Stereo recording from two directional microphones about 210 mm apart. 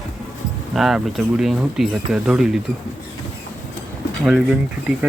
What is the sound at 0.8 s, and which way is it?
Speech, centre (ahead or behind).